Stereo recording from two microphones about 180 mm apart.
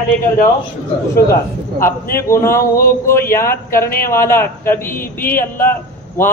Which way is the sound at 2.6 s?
50° left (ahead or behind).